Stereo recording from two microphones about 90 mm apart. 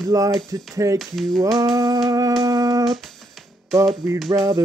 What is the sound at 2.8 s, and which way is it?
Music, centre (ahead or behind).